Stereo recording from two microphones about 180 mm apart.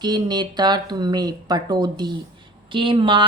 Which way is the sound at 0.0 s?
25° right (ahead or behind).